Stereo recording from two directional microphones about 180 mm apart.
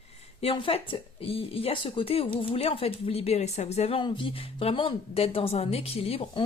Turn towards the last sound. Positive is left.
turn(degrees=35)  # may be behind; listen again after turning